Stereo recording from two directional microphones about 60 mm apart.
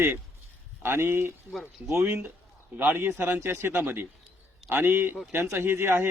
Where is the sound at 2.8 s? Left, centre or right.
Right.